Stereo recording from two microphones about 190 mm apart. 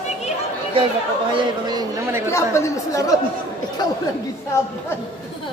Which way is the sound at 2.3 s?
15° left (ahead or behind).